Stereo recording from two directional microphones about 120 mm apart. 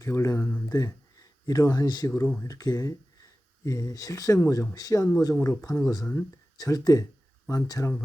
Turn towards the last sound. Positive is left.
turn(degrees=30)  # may be behind; listen again after turning